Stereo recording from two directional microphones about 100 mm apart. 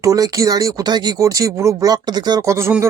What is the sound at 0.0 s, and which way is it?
Speech, 35° right (ahead or behind).